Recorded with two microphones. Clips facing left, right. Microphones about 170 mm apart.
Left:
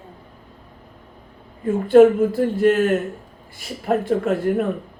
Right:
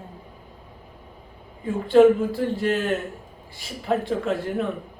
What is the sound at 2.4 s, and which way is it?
Speech, 50° left (ahead or behind).